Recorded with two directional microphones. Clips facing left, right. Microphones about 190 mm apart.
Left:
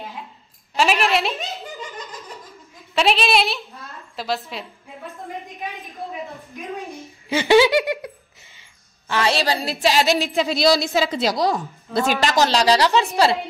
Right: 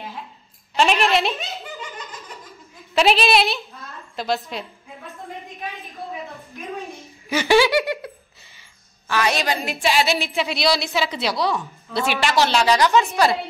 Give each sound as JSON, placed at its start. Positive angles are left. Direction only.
{"t": 0.7, "sound": "a woman's voice", "side_deg": 0}
{"t": 2.9, "sound": "a woman's voice", "side_deg": 0}
{"t": 6.2, "sound": "a sound", "side_deg": 15}
{"t": 7.3, "sound": "speech", "side_deg": 20}
{"t": 9.1, "sound": "a woman's voice", "side_deg": 30}